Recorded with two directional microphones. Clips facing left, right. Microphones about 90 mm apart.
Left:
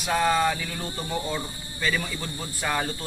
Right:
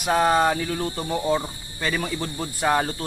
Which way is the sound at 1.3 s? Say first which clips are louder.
Right 6 dB; 30° right (ahead or behind).